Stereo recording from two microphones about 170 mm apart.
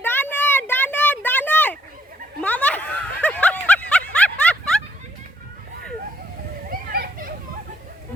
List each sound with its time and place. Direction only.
0.0 s a sound: 10° left (ahead or behind)
2.4 s snicker: 10° left (ahead or behind)
6.7 s children playing: 55° right (ahead or behind)